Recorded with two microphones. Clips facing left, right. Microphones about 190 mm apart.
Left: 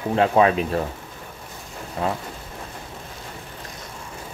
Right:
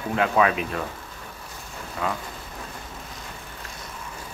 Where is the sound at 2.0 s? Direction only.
30° left (ahead or behind).